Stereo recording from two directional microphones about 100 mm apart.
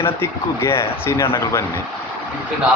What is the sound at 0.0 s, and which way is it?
Speech, 25° left (ahead or behind).